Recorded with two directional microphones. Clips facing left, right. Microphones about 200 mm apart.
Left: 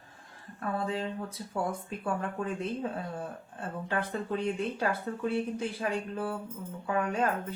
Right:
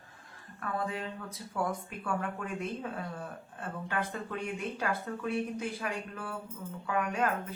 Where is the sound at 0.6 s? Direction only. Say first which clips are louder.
Left 3 dB; 30° left (ahead or behind).